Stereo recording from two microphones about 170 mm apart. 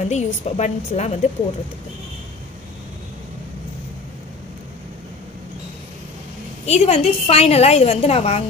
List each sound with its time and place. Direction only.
0.1 s a woman's voice: 40° left (ahead or behind)
6.6 s a woman's voice: 40° left (ahead or behind)